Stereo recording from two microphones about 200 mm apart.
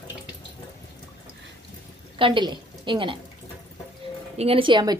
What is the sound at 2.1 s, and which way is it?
A woman's voice, 25° right (ahead or behind).